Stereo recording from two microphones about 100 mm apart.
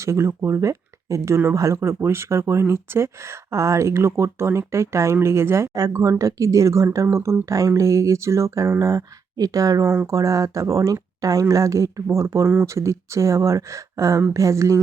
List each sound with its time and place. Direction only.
0.0 s speech: 30° right (ahead or behind)